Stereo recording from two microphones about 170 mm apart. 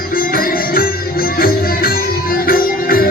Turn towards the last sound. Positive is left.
turn(degrees=60)  # may be behind; listen again after turning